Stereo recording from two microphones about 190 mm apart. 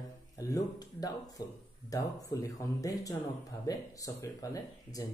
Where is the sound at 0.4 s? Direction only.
15° left (ahead or behind).